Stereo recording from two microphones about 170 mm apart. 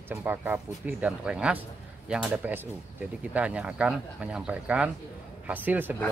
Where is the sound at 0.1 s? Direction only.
10° right (ahead or behind).